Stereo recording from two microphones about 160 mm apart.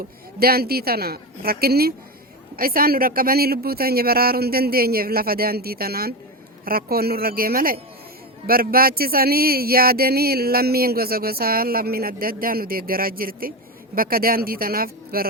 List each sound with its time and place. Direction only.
0.3 s speech: 70° right (ahead or behind)